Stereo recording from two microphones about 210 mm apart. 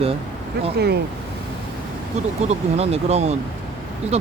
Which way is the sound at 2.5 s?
30° right (ahead or behind).